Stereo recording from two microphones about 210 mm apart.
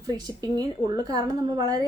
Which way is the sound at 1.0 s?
20° right (ahead or behind).